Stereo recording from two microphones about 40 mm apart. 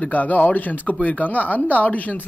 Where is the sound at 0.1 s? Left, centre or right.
Left.